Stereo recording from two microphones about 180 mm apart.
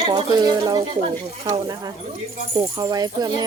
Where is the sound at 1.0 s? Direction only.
30° right (ahead or behind).